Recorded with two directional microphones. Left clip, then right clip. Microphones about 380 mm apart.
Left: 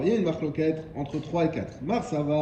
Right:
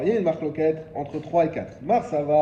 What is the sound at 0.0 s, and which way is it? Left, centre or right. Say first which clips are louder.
A man's voice: right 3 dB; centre.